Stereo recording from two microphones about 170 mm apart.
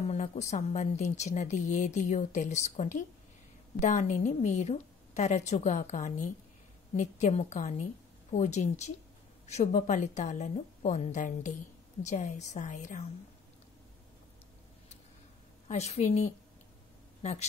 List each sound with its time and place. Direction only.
0.1 s a woman's voice: 40° left (ahead or behind)
15.7 s a woman's voice: 40° left (ahead or behind)